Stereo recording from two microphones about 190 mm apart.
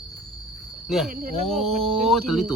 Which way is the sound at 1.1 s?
50° right (ahead or behind).